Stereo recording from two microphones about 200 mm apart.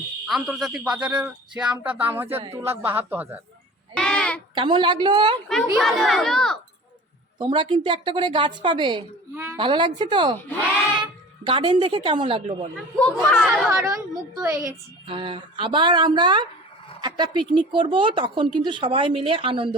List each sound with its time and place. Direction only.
0.3 s a man's voice: centre (ahead or behind)
3.9 s child singing: 5° left (ahead or behind)
4.5 s speech: 25° right (ahead or behind)
5.7 s a man's voice: centre (ahead or behind)
7.3 s speech: 25° right (ahead or behind)
9.3 s a woman's voice: 10° right (ahead or behind)
9.6 s speech: 25° right (ahead or behind)
11.4 s speech: 25° right (ahead or behind)
13.0 s a man's voice: 5° left (ahead or behind)
14.4 s speech: 15° right (ahead or behind)